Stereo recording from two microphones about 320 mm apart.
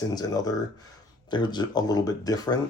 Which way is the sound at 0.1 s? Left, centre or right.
Centre.